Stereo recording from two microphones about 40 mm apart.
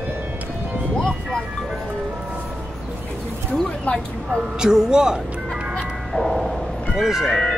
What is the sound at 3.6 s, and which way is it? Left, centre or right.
Speech, left.